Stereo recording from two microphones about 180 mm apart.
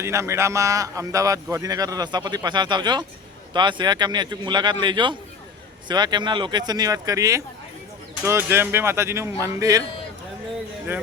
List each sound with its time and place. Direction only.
0.0 s a man's voice: 15° right (ahead or behind)